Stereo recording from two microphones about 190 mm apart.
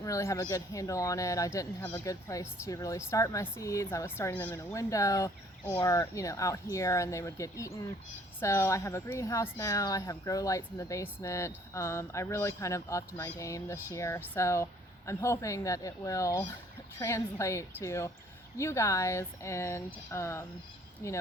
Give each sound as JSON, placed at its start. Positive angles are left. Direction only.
{"t": 0.0, "sound": "speech", "side_deg": 15}